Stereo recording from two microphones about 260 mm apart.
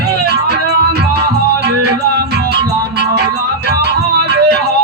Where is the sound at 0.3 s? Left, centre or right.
Right.